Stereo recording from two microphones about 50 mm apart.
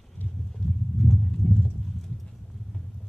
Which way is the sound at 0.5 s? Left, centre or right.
Centre.